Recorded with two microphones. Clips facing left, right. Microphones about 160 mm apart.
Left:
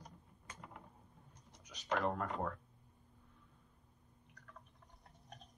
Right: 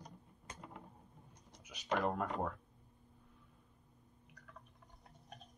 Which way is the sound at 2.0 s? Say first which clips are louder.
Right 1 dB; centre (ahead or behind).